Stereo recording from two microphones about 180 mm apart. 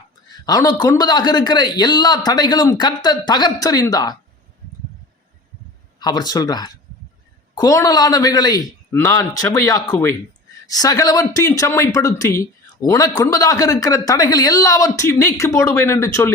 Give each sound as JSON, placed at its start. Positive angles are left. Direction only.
{"t": 0.4, "sound": "speech", "side_deg": 20}
{"t": 6.0, "sound": "speech", "side_deg": 20}